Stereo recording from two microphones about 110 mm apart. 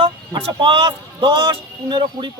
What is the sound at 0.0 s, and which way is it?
A man's voice, 55° right (ahead or behind).